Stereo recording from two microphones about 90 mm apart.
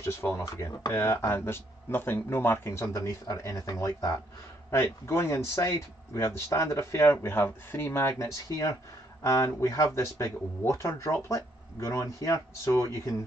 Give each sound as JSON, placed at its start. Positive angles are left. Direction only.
{"t": 0.0, "sound": "speech", "side_deg": 30}